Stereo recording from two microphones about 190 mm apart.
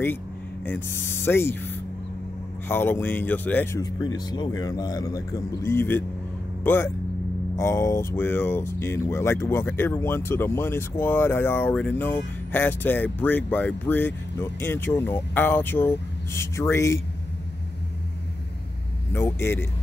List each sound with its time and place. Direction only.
0.7 s speech: 10° left (ahead or behind)
3.8 s speech: 20° left (ahead or behind)
19.1 s speech: 10° left (ahead or behind)